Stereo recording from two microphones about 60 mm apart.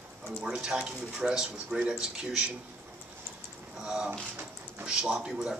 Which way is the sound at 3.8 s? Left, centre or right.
Centre.